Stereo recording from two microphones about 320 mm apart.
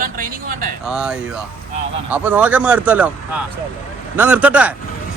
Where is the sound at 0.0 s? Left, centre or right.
Right.